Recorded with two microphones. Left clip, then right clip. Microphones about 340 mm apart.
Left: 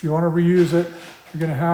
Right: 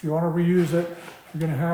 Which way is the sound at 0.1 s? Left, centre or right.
Left.